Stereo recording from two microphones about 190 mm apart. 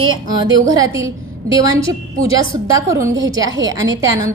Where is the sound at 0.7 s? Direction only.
20° right (ahead or behind).